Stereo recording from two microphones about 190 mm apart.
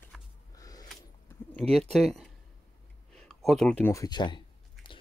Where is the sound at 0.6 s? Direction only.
20° left (ahead or behind).